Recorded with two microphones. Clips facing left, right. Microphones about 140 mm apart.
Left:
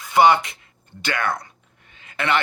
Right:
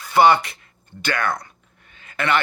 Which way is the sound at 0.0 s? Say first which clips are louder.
Even; 15° left (ahead or behind).